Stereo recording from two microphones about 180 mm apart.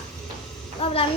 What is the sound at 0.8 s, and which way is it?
Child singing, 30° left (ahead or behind).